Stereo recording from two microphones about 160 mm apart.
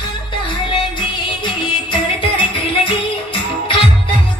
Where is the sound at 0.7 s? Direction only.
30° left (ahead or behind).